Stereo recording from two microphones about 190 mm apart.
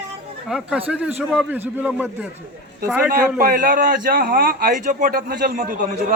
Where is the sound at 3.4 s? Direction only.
45° right (ahead or behind).